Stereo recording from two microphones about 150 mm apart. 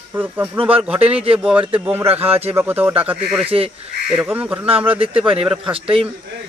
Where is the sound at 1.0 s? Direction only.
40° right (ahead or behind).